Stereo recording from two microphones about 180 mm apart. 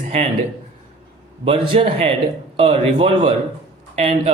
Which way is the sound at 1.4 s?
30° right (ahead or behind).